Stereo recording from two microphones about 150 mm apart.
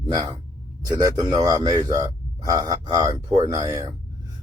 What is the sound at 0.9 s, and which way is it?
Speech, 25° right (ahead or behind).